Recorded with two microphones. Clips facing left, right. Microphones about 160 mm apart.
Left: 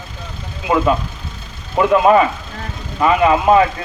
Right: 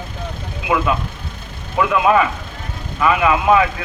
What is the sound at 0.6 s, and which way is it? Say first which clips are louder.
Speech: left 3 dB; 35° left (ahead or behind).